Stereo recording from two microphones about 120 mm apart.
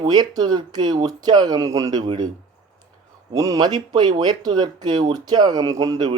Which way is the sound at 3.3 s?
30° right (ahead or behind).